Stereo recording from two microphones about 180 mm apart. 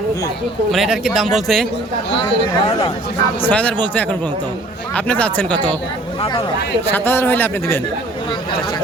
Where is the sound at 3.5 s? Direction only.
5° left (ahead or behind).